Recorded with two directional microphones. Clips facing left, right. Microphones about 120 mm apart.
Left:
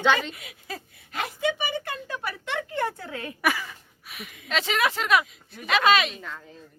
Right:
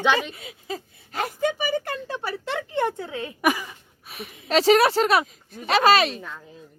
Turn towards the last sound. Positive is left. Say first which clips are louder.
# right 3 dB
turn(degrees=-35)  # may be behind; listen again after turning